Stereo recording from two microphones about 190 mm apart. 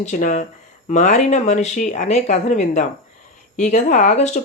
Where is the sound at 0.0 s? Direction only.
40° left (ahead or behind).